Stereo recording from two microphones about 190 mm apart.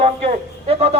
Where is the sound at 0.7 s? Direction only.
35° right (ahead or behind).